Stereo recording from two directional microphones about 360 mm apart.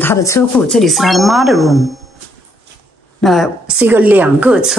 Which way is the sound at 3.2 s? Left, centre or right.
Centre.